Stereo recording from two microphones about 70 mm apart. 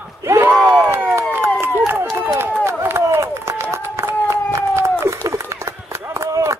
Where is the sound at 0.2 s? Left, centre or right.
Right.